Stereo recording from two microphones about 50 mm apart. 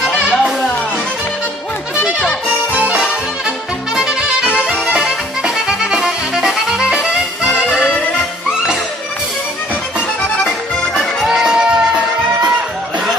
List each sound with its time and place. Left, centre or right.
0.2 s music: right
2.7 s music: right
3.4 s music: centre
10.9 s music: centre